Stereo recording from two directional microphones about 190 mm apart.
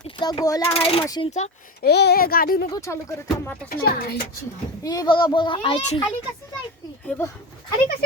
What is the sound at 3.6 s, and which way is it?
Speech, 50° left (ahead or behind).